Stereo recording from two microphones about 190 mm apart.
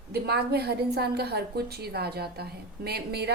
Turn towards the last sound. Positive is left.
turn(degrees=-60)  # may be behind; listen again after turning